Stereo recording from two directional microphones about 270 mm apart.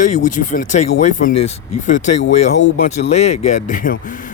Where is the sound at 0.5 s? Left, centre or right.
Left.